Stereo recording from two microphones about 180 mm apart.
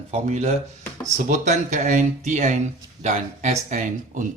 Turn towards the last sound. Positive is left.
turn(degrees=-45)  # may be behind; listen again after turning